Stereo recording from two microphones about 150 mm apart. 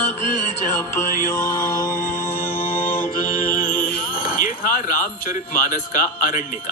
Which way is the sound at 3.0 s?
65° left (ahead or behind).